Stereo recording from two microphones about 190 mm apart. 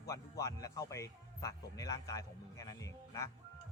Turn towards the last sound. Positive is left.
turn(degrees=15)  # may be behind; listen again after turning